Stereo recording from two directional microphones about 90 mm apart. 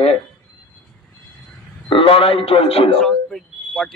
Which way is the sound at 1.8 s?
75° left (ahead or behind).